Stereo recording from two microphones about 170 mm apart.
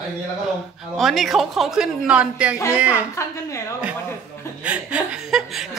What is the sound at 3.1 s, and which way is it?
Speech, 15° left (ahead or behind).